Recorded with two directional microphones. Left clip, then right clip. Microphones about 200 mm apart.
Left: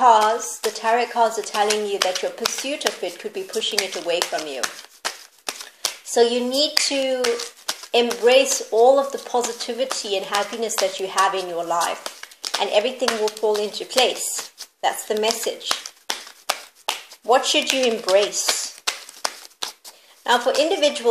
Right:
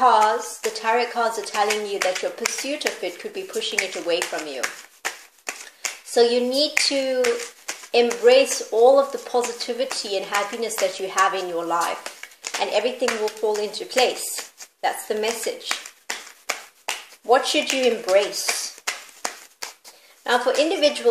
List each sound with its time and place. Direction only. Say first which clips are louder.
0.0 s speech: left 2 dB; 25° left (ahead or behind)
7.9 s speech: even; 25° left (ahead or behind)
16.4 s a sound: left 3 dB; 30° left (ahead or behind)
17.8 s speech: right 1 dB; 25° left (ahead or behind)
18.4 s a sound: left 3 dB; 25° left (ahead or behind)
20.2 s speech: left 1 dB; 30° left (ahead or behind)